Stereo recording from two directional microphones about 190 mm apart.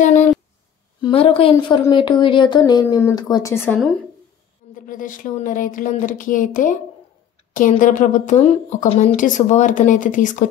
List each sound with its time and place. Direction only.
0.0 s a sound: 40° left (ahead or behind)
1.0 s speech: 30° left (ahead or behind); by 3.8 s 10° left (ahead or behind)
4.7 s a woman's voice: 45° left (ahead or behind)